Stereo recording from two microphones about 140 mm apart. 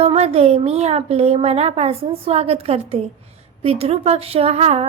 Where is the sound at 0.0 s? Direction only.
45° right (ahead or behind).